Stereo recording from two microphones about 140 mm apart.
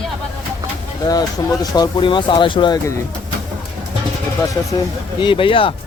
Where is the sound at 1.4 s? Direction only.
35° left (ahead or behind).